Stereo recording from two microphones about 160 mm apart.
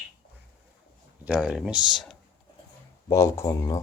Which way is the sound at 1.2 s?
5° right (ahead or behind).